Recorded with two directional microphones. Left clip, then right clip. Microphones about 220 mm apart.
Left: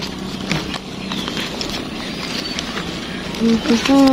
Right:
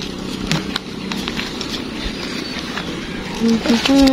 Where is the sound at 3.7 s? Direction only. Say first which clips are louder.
Even; 35° right (ahead or behind).